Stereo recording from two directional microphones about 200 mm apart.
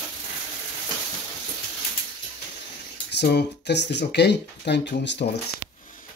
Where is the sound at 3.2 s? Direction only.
55° left (ahead or behind).